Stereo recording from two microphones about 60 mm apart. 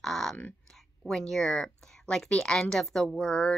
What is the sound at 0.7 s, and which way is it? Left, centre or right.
A woman's voice, centre.